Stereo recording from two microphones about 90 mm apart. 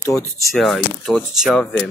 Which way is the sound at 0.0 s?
35° left (ahead or behind).